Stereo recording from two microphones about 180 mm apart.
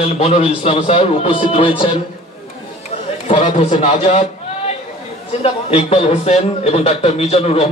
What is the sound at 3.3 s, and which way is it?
Speech, 35° left (ahead or behind).